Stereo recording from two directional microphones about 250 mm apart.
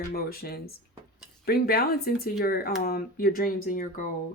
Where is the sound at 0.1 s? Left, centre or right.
Left.